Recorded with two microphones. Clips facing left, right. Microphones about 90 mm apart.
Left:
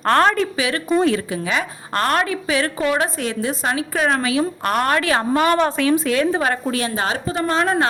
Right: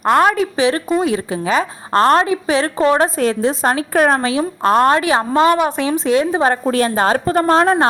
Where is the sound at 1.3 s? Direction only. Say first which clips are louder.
Right 5 dB; 35° right (ahead or behind).